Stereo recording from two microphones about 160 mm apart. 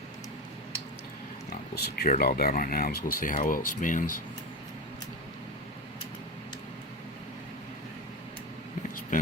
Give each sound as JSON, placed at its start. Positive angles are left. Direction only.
{"t": 1.7, "sound": "speech", "side_deg": 80}